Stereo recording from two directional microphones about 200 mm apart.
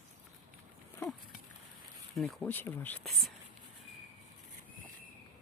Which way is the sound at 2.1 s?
Centre (ahead or behind).